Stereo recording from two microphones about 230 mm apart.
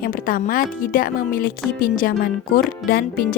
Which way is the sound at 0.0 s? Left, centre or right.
Left.